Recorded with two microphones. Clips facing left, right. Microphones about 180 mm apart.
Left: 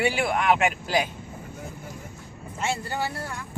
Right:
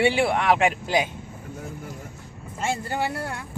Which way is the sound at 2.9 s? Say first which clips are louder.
Right 3 dB; 60° right (ahead or behind).